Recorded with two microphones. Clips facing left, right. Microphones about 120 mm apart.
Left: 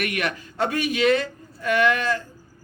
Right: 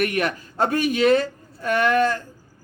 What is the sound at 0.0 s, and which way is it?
A man's voice, 35° right (ahead or behind).